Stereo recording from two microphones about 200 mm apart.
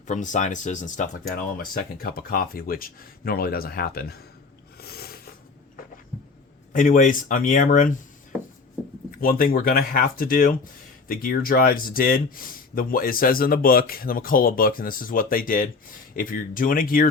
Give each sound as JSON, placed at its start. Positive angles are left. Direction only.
{"t": 0.1, "sound": "speech", "side_deg": 40}
{"t": 4.8, "sound": "a sound", "side_deg": 50}
{"t": 6.7, "sound": "speech", "side_deg": 40}
{"t": 9.2, "sound": "speech", "side_deg": 45}